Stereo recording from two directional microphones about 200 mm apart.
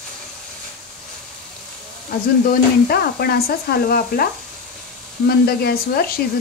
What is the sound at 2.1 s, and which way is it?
Speech, 50° left (ahead or behind).